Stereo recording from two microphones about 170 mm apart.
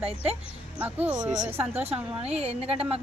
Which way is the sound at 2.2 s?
40° right (ahead or behind).